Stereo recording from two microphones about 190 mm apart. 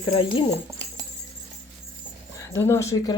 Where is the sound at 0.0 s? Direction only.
25° left (ahead or behind).